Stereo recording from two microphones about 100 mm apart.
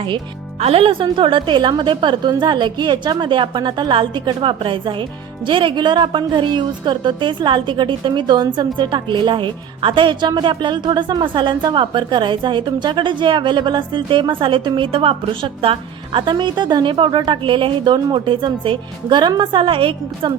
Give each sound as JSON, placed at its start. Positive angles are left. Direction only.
{"t": 0.6, "sound": "speech", "side_deg": -80}
{"t": 1.0, "sound": "a woman's voice", "side_deg": -60}